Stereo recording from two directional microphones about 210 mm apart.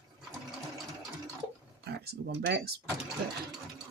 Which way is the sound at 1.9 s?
50° right (ahead or behind).